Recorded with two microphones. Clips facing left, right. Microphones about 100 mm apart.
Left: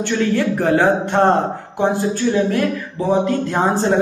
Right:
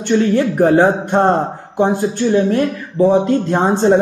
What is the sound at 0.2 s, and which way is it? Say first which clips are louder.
Speech: right 2 dB; 25° right (ahead or behind).